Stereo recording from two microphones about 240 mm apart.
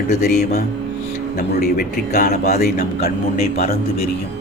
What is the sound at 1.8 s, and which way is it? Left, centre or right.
Speech, left.